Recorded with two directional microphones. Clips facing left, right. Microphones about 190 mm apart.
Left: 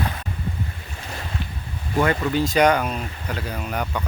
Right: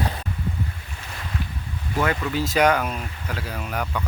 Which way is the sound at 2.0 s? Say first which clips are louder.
Left 3 dB; 5° right (ahead or behind).